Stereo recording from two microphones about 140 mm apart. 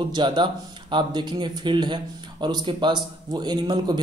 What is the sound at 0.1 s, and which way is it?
A man's voice, 35° right (ahead or behind).